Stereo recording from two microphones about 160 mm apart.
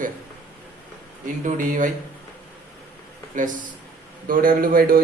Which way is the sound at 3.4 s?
55° right (ahead or behind).